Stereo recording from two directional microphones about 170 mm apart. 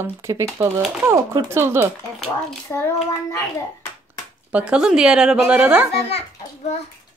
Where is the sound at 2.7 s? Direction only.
10° left (ahead or behind).